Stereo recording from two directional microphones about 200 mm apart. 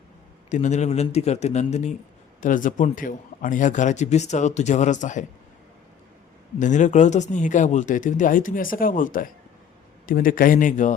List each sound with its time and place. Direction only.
0.5 s a man's voice: 35° left (ahead or behind)
6.6 s a man's voice: 40° left (ahead or behind)